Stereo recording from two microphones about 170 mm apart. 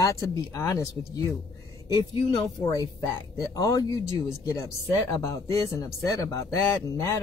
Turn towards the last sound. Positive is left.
turn(degrees=15)  # may be behind; listen again after turning